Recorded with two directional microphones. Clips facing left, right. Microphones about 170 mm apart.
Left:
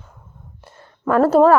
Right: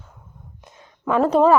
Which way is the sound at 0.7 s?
10° right (ahead or behind).